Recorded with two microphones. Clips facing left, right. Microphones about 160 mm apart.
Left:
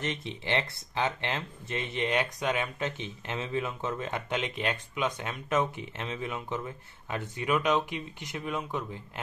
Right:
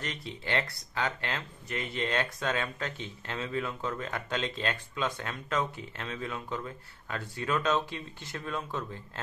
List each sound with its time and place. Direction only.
0.0 s speech: 20° left (ahead or behind)